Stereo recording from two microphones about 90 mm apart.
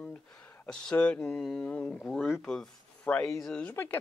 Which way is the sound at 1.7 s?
20° left (ahead or behind).